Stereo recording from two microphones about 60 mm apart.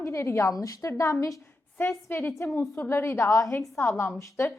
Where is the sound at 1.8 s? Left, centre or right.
Left.